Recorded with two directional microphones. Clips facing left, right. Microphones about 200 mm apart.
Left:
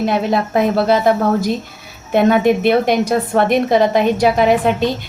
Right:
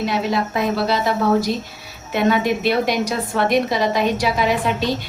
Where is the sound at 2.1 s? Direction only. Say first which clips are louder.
Left 6 dB; 55° left (ahead or behind).